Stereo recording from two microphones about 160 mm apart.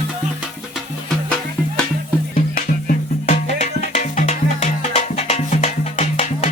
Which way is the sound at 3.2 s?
45° left (ahead or behind).